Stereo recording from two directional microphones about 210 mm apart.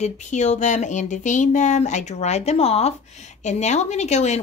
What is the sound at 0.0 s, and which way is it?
Speech, 35° left (ahead or behind).